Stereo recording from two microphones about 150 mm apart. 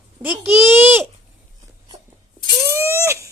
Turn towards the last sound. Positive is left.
turn(degrees=-20)  # may be behind; listen again after turning